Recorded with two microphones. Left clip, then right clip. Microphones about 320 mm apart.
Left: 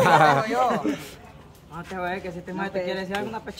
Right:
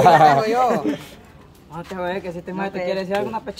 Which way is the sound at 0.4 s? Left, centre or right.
Right.